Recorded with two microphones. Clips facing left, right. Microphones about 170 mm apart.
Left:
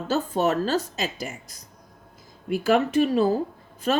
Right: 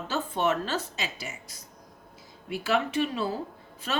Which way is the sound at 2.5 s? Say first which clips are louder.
Left 6 dB; 45° left (ahead or behind).